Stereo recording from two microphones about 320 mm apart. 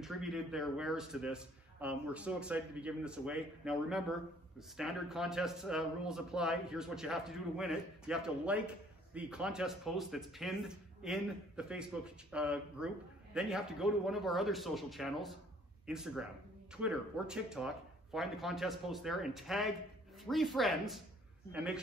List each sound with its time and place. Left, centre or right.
0.0 s speech: centre